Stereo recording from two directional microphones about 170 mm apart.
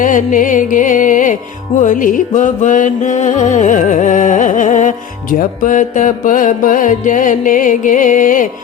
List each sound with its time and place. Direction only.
0.0 s music: 50° left (ahead or behind)